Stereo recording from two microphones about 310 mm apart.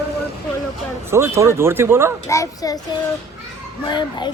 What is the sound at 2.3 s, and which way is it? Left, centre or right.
Speech, centre.